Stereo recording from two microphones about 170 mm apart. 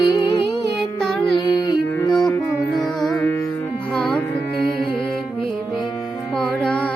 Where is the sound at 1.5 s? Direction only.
25° left (ahead or behind).